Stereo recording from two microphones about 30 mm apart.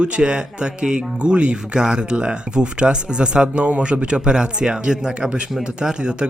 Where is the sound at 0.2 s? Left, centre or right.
Right.